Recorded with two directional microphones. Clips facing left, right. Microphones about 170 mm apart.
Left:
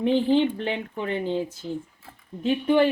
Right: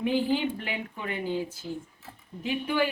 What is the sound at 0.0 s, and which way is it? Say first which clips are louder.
Speech: left 5 dB; 5° right (ahead or behind).